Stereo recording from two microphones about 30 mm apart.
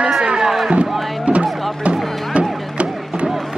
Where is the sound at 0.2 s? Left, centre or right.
Right.